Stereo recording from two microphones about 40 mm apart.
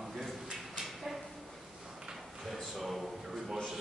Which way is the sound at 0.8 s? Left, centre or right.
Centre.